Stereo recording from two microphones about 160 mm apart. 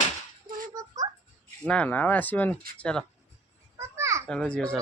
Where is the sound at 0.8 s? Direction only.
20° right (ahead or behind).